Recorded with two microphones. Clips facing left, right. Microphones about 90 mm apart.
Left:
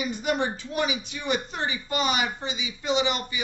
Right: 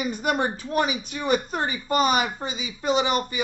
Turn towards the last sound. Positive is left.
turn(degrees=-45)  # may be behind; listen again after turning